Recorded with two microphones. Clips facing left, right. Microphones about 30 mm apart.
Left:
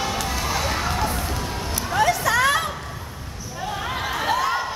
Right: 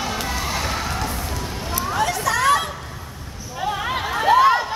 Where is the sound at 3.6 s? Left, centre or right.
Right.